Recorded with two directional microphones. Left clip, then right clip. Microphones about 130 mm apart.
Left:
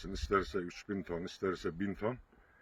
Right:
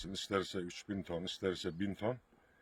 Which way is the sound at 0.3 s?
55° right (ahead or behind).